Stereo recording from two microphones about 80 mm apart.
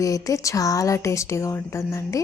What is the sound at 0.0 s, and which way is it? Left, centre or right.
A woman's voice, left.